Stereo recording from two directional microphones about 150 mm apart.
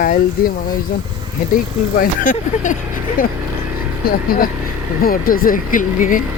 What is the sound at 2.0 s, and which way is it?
Speech, 60° left (ahead or behind).